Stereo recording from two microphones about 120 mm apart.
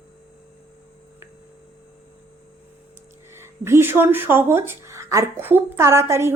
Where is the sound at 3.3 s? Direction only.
20° right (ahead or behind).